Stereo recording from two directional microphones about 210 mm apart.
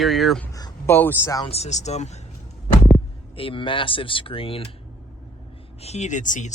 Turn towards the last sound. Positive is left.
turn(degrees=35)  # may be behind; listen again after turning